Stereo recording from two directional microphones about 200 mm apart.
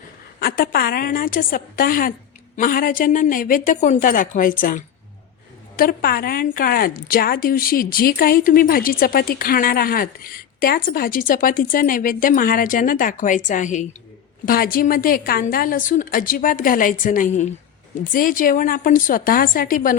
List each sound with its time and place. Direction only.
0.3 s a woman's voice: 45° left (ahead or behind)
5.7 s a woman's voice: 45° left (ahead or behind)